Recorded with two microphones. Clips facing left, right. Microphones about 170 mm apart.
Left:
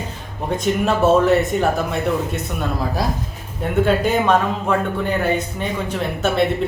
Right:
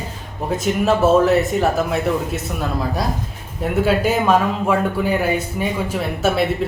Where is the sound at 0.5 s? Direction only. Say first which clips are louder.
Right 1 dB; 5° right (ahead or behind).